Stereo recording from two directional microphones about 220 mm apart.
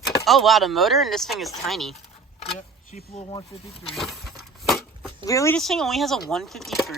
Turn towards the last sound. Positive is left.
turn(degrees=0)  # may be behind; listen again after turning